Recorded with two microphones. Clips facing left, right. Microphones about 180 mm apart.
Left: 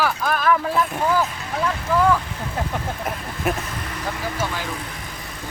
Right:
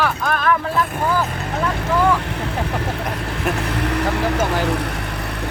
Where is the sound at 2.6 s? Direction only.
70° right (ahead or behind).